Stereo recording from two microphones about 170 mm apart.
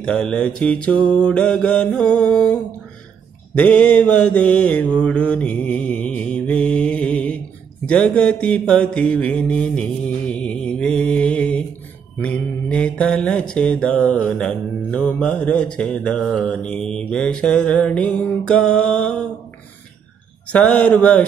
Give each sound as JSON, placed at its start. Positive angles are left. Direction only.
{"t": 0.0, "sound": "mantra", "side_deg": 5}
{"t": 20.5, "sound": "a man's voice", "side_deg": 5}